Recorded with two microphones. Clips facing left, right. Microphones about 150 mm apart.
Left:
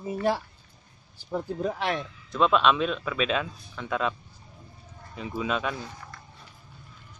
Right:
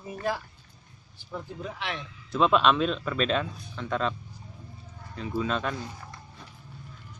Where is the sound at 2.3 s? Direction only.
Centre (ahead or behind).